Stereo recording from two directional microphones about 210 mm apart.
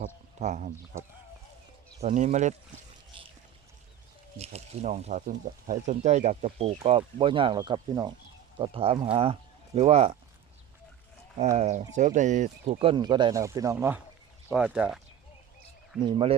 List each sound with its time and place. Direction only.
0.3 s speech: 35° right (ahead or behind)
2.0 s speech: 35° right (ahead or behind)
3.1 s pour: 25° right (ahead or behind)
4.4 s speech: 30° right (ahead or behind)
11.5 s speech: 35° right (ahead or behind); by 15.0 s 5° right (ahead or behind)
16.0 s speech: 20° right (ahead or behind)